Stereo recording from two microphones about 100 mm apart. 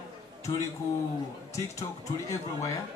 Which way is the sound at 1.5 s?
30° left (ahead or behind).